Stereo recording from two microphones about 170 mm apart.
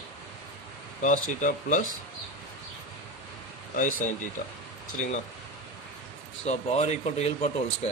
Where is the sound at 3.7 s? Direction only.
50° left (ahead or behind).